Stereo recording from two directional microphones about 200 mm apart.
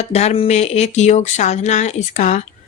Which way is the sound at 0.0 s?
30° left (ahead or behind).